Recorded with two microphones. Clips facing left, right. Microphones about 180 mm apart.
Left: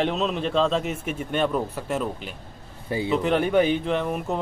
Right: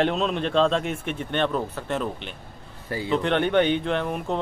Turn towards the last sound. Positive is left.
turn(degrees=0)  # may be behind; listen again after turning